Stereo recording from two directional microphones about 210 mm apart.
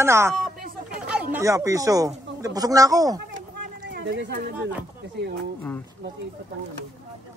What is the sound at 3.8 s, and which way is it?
Speech, 55° right (ahead or behind).